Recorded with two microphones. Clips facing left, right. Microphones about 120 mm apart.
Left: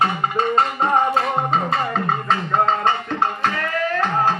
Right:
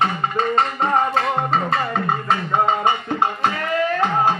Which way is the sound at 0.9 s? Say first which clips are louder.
Left 1 dB; centre (ahead or behind).